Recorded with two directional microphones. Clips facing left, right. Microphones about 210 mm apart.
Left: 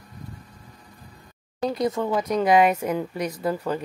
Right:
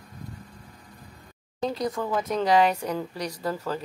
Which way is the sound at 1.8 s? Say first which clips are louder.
Left 4 dB; 25° left (ahead or behind).